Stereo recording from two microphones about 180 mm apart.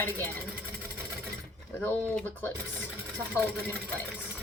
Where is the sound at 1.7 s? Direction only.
10° left (ahead or behind).